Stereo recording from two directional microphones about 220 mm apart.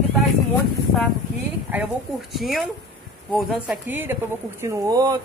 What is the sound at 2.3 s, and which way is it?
Speech, centre (ahead or behind).